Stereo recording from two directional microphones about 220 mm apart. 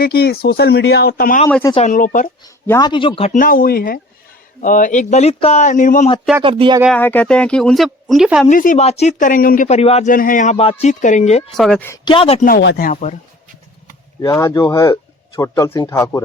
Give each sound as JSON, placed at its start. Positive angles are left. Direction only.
{"t": 0.0, "sound": "speech", "side_deg": 45}
{"t": 1.5, "sound": "speech", "side_deg": 5}
{"t": 1.7, "sound": "speech", "side_deg": 35}
{"t": 2.6, "sound": "speech", "side_deg": 15}
{"t": 6.4, "sound": "speech", "side_deg": -25}
{"t": 6.9, "sound": "speech", "side_deg": 5}
{"t": 8.4, "sound": "speech", "side_deg": 35}
{"t": 11.5, "sound": "speech", "side_deg": 0}
{"t": 12.0, "sound": "speech", "side_deg": 25}
{"t": 12.5, "sound": "speech", "side_deg": 45}
{"t": 14.2, "sound": "speech", "side_deg": 15}